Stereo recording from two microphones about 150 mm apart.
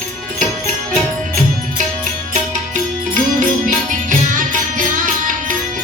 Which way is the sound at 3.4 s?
60° right (ahead or behind).